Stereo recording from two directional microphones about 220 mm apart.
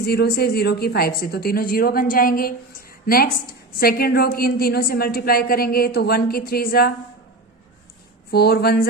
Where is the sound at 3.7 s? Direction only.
45° left (ahead or behind).